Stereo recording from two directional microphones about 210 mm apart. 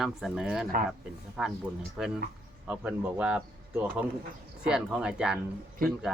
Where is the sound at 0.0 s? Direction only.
Centre (ahead or behind).